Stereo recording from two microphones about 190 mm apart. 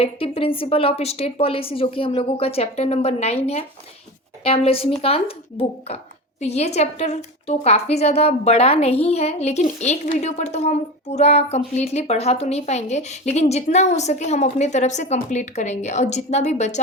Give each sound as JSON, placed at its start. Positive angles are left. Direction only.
{"t": 0.0, "sound": "a woman's voice", "side_deg": 30}